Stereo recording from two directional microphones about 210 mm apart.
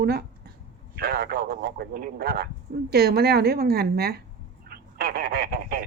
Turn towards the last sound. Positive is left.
turn(degrees=-50)  # may be behind; listen again after turning